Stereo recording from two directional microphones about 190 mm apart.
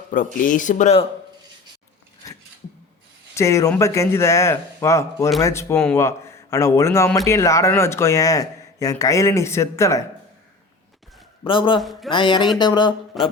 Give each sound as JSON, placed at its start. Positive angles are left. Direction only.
{"t": 0.1, "sound": "speech", "side_deg": 45}
{"t": 3.3, "sound": "a man's voice", "side_deg": 15}
{"t": 11.4, "sound": "speech", "side_deg": 25}
{"t": 11.8, "sound": "speech", "side_deg": 0}
{"t": 12.1, "sound": "speech", "side_deg": 25}
{"t": 13.2, "sound": "speech", "side_deg": 0}